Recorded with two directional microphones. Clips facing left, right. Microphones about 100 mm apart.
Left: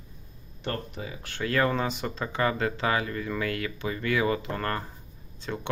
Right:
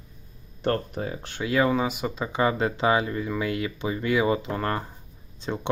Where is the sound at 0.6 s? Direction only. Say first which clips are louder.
Right 7 dB; 45° right (ahead or behind).